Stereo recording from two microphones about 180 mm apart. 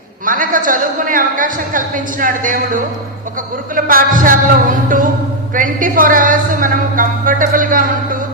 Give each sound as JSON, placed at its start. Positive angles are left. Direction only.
{"t": 0.3, "sound": "a man's voice", "side_deg": -50}